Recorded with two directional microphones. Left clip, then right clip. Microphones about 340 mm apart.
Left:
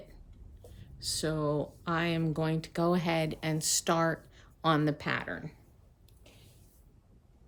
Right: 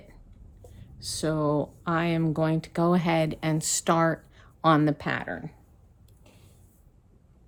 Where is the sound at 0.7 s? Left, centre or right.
Centre.